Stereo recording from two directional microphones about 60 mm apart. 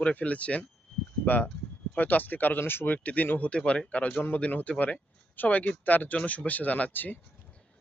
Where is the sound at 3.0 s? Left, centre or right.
Left.